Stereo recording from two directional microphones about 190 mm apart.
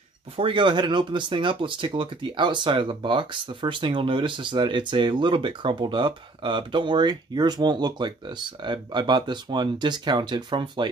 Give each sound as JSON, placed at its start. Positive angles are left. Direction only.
{"t": 0.4, "sound": "speech", "side_deg": -25}